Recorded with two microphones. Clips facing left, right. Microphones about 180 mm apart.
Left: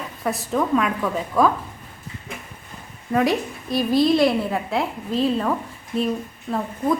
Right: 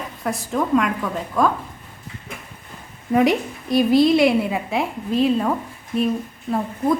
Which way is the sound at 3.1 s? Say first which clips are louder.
Right 3 dB; 20° right (ahead or behind).